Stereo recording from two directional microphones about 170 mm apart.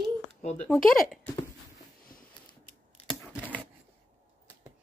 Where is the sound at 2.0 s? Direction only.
55° left (ahead or behind).